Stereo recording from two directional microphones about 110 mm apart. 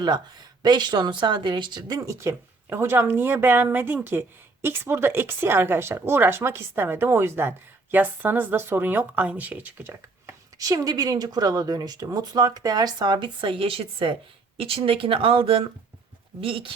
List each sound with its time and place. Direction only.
0.6 s speech: 40° right (ahead or behind)
2.0 s speech: 25° right (ahead or behind)
10.7 s speech: 35° right (ahead or behind); by 16.7 s 55° right (ahead or behind)